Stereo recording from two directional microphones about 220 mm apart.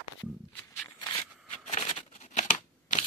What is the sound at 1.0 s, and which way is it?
Shuffling cards, 15° left (ahead or behind).